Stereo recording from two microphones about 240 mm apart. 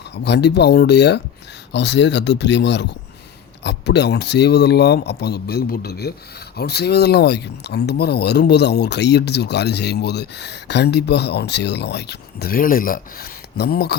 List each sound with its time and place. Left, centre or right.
0.3 s speech: left